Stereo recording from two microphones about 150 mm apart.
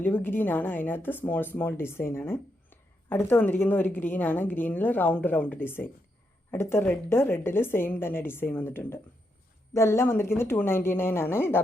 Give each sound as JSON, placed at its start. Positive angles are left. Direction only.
{"t": 0.0, "sound": "speech", "side_deg": 15}